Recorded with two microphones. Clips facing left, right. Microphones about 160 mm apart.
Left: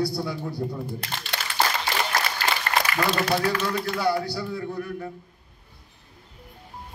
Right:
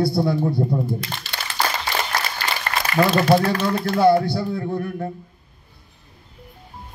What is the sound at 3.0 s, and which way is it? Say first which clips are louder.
A man's voice: right 10 dB; 50° right (ahead or behind).